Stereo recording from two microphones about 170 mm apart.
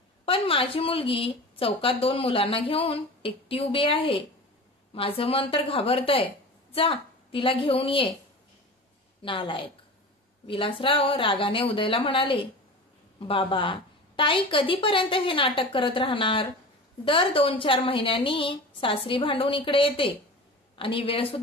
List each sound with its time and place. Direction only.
0.2 s a woman's voice: 30° left (ahead or behind)
9.2 s a woman's voice: 30° left (ahead or behind)